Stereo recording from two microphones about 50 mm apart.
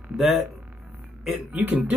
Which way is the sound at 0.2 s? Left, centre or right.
Centre.